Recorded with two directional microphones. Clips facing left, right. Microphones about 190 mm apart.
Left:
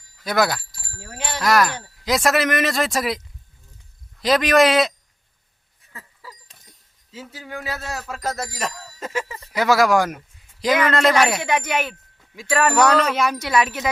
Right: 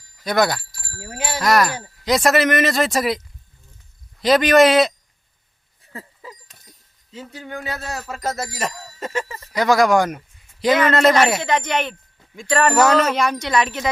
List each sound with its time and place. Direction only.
0.3 s speech: centre (ahead or behind)
4.2 s speech: centre (ahead or behind)
6.2 s a sound: 20° right (ahead or behind)
7.1 s speech: 5° left (ahead or behind)